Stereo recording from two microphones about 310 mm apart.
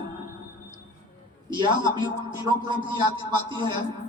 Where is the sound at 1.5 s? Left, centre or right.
Centre.